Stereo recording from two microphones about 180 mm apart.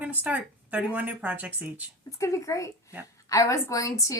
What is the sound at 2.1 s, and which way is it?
A woman's voice, 15° left (ahead or behind).